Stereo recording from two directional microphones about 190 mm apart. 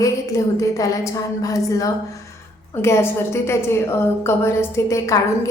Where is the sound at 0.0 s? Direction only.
15° left (ahead or behind).